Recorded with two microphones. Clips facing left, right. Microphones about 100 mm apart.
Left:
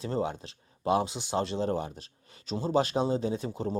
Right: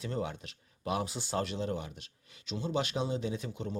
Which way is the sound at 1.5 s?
35° left (ahead or behind).